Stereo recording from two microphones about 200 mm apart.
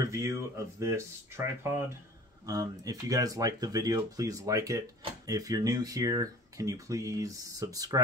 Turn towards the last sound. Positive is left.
turn(degrees=-15)  # may be behind; listen again after turning